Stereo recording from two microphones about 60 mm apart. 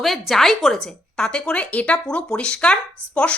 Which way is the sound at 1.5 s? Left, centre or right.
Left.